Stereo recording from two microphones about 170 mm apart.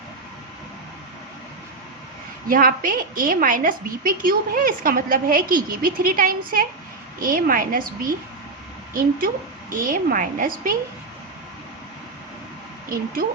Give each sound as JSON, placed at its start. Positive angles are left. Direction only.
{"t": 2.5, "sound": "a woman's voice", "side_deg": -55}